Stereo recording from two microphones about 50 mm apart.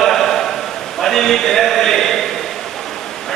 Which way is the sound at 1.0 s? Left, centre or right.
Centre.